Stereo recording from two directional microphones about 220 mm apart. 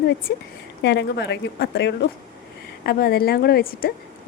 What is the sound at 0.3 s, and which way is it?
A woman's voice, 50° left (ahead or behind).